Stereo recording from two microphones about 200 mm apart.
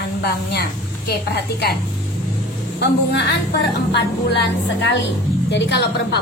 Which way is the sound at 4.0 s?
60° left (ahead or behind).